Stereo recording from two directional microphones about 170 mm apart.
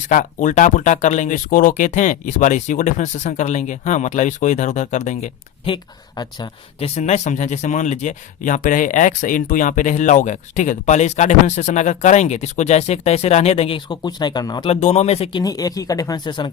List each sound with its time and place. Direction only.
0.1 s speech: 50° left (ahead or behind)
5.6 s speech: 25° left (ahead or behind)
14.7 s speech: 40° left (ahead or behind)